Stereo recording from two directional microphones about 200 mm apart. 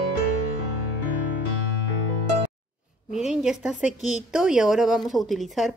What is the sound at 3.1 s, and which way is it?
A woman's voice, 5° right (ahead or behind).